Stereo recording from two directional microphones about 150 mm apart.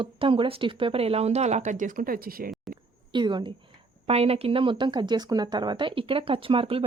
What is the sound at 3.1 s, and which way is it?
Speech, 30° right (ahead or behind).